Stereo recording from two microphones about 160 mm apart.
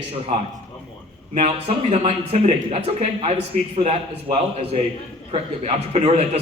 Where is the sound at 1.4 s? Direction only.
45° right (ahead or behind).